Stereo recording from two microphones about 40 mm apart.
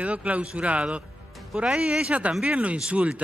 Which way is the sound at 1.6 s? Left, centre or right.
Right.